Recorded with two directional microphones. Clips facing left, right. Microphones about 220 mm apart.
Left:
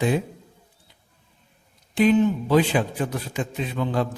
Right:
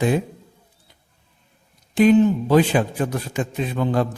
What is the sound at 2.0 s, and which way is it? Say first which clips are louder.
A man's voice: right 4 dB; 45° right (ahead or behind).